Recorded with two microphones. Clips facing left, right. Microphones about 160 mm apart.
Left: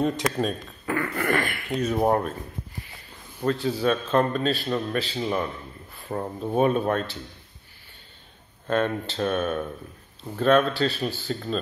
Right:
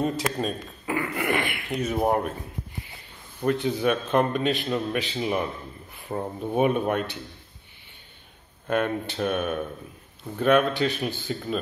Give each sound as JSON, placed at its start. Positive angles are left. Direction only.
{"t": 0.0, "sound": "a man's voice", "side_deg": 0}
{"t": 0.9, "sound": "a sound", "side_deg": -15}
{"t": 1.8, "sound": "a man's voice", "side_deg": -10}
{"t": 3.4, "sound": "a man's voice", "side_deg": -20}
{"t": 8.6, "sound": "a man's voice", "side_deg": -10}